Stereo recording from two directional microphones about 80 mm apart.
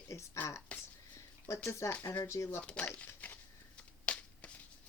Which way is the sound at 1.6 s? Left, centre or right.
Left.